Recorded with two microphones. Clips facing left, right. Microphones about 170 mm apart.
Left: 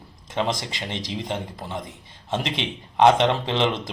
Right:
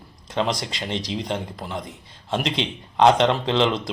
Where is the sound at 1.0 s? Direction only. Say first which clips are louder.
Right 2 dB; 20° left (ahead or behind).